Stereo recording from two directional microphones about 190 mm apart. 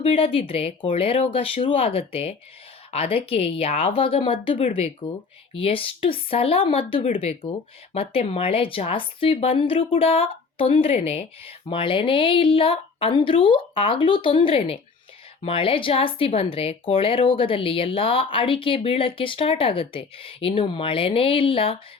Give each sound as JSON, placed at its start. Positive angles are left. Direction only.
{"t": 0.0, "sound": "a woman's voice", "side_deg": 30}